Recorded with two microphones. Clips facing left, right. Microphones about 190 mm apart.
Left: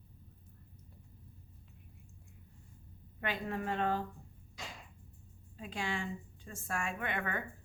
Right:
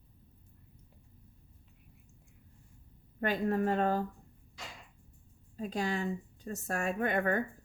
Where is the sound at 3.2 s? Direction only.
40° right (ahead or behind).